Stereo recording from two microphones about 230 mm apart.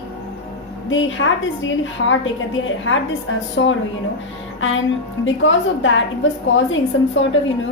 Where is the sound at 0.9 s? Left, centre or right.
Left.